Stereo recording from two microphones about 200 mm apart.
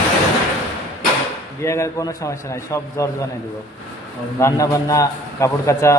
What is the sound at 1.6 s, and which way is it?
A man's voice, 15° left (ahead or behind).